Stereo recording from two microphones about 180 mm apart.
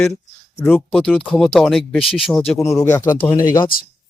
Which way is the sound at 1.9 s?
30° left (ahead or behind).